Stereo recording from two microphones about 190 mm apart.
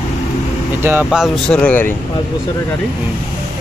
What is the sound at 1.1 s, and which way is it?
Speech, 5° left (ahead or behind).